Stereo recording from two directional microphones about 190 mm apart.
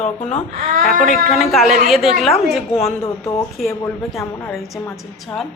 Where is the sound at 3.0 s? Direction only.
15° left (ahead or behind).